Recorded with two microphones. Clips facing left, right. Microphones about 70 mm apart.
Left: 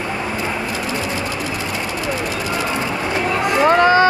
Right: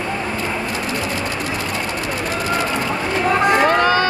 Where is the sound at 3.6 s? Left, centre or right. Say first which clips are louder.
Left 3 dB; left.